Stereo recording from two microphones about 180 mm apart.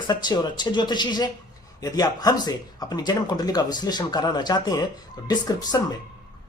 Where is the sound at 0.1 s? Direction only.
25° left (ahead or behind).